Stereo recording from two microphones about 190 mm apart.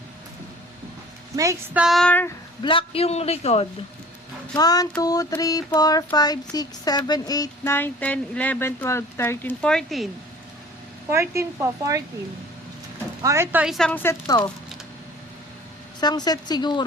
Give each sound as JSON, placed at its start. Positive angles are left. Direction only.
{"t": 1.4, "sound": "a woman's voice", "side_deg": -15}
{"t": 1.8, "sound": "a woman's voice", "side_deg": 0}
{"t": 2.6, "sound": "a man's voice", "side_deg": 25}
{"t": 4.5, "sound": "a woman's voice", "side_deg": 20}
{"t": 11.1, "sound": "a woman's voice", "side_deg": -15}
{"t": 13.2, "sound": "a woman's voice", "side_deg": -15}
{"t": 16.0, "sound": "a woman's voice", "side_deg": 20}